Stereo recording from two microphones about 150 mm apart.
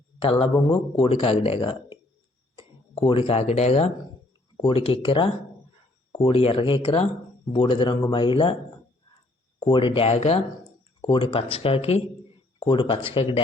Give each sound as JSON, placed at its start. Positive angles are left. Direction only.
{"t": 0.2, "sound": "speech", "side_deg": 35}
{"t": 9.6, "sound": "speech", "side_deg": 35}